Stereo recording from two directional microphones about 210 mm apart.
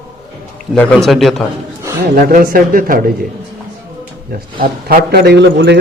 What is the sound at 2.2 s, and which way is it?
Speech, 45° right (ahead or behind).